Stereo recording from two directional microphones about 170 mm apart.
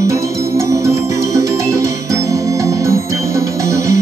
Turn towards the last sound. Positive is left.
turn(degrees=-20)  # may be behind; listen again after turning